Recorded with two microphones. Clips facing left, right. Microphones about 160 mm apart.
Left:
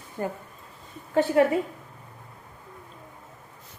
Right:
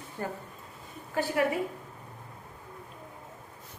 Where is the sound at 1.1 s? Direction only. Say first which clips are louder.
Left 9 dB; 25° left (ahead or behind).